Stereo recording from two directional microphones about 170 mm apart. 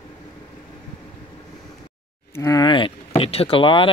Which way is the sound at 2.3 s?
20° left (ahead or behind).